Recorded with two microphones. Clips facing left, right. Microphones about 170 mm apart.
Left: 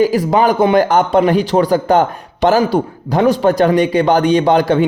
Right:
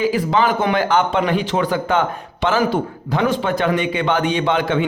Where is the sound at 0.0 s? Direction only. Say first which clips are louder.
Left 5 dB; 40° left (ahead or behind).